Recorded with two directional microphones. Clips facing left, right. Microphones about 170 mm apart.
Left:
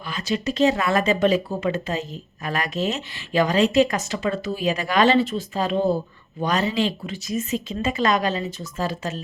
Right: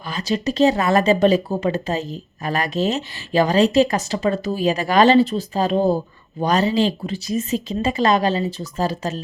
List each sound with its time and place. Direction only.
0.1 s speech: 35° right (ahead or behind)